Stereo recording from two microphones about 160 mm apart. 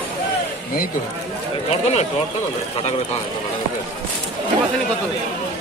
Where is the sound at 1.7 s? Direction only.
45° left (ahead or behind).